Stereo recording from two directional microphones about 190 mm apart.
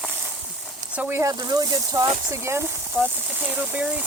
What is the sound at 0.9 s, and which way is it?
Speech, 10° right (ahead or behind).